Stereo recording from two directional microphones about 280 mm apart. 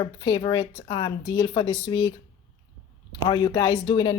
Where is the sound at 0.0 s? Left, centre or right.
Centre.